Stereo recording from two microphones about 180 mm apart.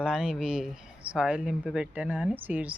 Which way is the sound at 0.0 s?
5° right (ahead or behind).